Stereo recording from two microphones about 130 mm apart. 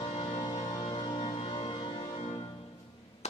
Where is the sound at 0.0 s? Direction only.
45° left (ahead or behind).